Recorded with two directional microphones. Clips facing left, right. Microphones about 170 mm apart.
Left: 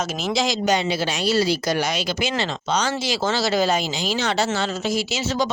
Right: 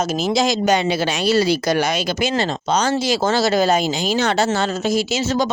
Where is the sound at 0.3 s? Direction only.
45° right (ahead or behind).